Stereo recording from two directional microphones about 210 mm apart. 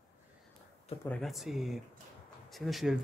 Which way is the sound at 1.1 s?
Centre (ahead or behind).